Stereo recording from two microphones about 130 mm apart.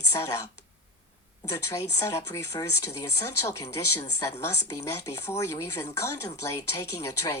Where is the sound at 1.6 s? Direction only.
20° left (ahead or behind).